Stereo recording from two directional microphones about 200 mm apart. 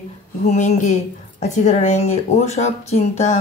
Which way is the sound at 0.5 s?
35° left (ahead or behind).